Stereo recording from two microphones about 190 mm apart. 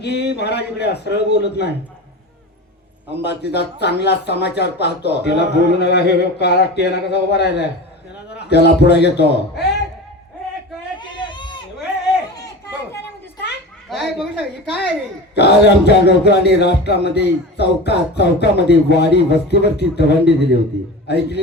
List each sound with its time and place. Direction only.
0.0 s speech: 60° left (ahead or behind)
3.5 s speech: 60° left (ahead or behind)
10.9 s a sound: 25° left (ahead or behind)
13.9 s a woman's voice: centre (ahead or behind)
15.4 s speech: 60° left (ahead or behind)